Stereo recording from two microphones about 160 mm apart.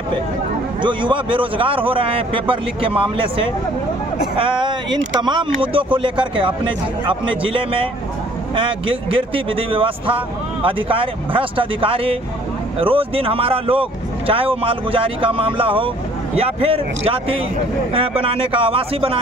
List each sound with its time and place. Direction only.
0.8 s speech: 30° right (ahead or behind)